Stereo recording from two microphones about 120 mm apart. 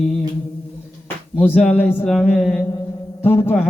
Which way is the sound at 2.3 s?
Centre (ahead or behind).